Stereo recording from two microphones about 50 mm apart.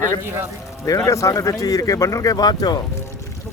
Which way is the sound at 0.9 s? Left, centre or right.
Left.